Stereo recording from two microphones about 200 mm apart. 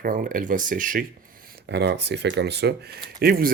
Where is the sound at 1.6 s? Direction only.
60° right (ahead or behind).